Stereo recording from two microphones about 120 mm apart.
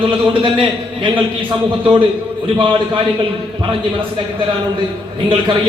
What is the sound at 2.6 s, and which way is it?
Speech, 45° right (ahead or behind).